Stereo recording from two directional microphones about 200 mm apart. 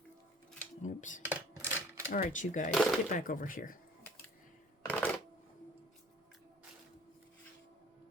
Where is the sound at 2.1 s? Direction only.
40° left (ahead or behind).